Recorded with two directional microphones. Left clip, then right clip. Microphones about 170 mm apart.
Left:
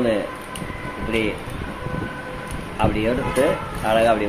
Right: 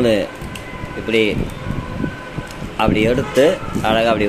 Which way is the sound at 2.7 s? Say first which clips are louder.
Right 5 dB; 55° right (ahead or behind).